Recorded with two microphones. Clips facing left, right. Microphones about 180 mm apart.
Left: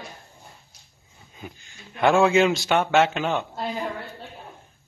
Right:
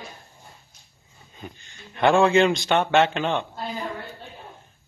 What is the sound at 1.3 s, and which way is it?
Speech, 5° left (ahead or behind).